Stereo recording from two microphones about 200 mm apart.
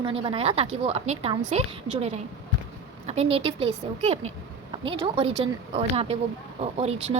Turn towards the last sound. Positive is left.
turn(degrees=-30)  # may be behind; listen again after turning